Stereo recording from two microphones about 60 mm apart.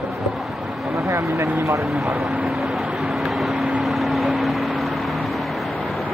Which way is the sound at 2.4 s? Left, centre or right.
Centre.